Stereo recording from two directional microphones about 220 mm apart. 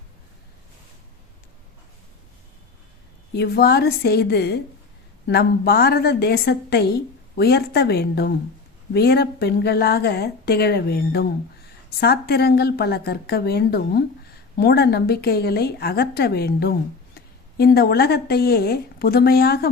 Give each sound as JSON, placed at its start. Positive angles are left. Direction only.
{"t": 3.3, "sound": "a woman's voice", "side_deg": 45}